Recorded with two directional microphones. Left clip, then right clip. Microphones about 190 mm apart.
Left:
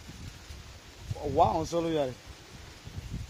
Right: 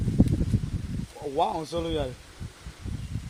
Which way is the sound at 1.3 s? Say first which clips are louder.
Left 1 dB; 25° left (ahead or behind).